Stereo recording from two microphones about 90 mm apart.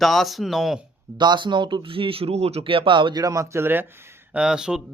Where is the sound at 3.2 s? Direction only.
40° right (ahead or behind).